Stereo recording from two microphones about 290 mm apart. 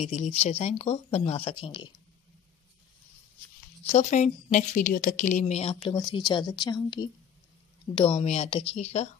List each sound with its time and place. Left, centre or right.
0.0 s a woman's voice: left
3.8 s a woman's voice: left